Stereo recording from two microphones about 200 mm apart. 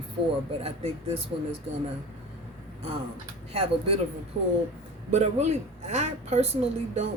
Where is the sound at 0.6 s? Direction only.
30° right (ahead or behind).